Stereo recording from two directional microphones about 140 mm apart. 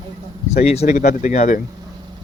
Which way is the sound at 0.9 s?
65° left (ahead or behind).